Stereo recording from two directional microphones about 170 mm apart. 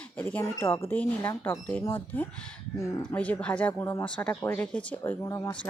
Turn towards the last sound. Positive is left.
turn(degrees=20)  # may be behind; listen again after turning